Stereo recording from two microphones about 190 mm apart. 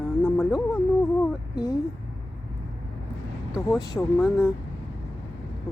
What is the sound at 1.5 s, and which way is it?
Speech, 20° left (ahead or behind).